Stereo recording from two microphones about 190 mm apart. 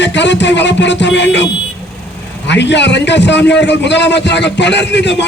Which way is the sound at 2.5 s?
65° left (ahead or behind).